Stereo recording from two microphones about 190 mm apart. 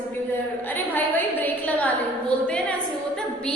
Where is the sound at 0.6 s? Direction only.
10° left (ahead or behind).